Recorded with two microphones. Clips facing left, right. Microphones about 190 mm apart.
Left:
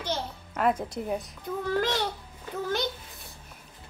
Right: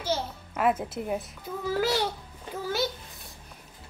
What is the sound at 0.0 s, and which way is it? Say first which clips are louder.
A child's voice: right 2 dB; 5° right (ahead or behind).